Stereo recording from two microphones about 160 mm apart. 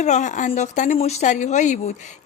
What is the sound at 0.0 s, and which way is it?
Speech, 50° left (ahead or behind).